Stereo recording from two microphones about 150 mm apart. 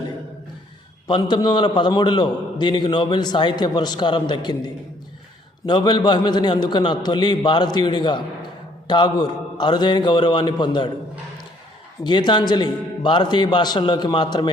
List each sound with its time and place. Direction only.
1.0 s a man's voice: 30° left (ahead or behind)
12.0 s a man's voice: 30° left (ahead or behind)